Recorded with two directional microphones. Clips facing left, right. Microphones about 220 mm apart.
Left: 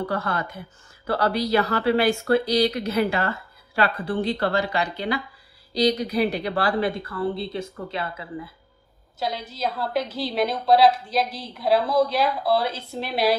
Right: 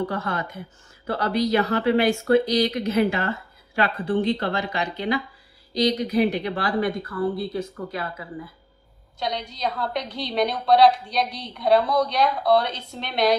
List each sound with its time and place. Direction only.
0.1 s speech: 35° left (ahead or behind)
9.2 s a woman's voice: 5° left (ahead or behind)